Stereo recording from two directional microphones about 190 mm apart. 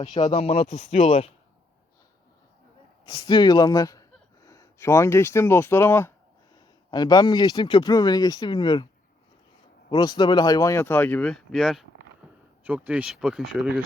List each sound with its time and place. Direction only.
0.2 s speech: 30° left (ahead or behind)
3.1 s speech: 25° left (ahead or behind)
9.9 s speech: 20° left (ahead or behind); by 13.8 s 5° right (ahead or behind)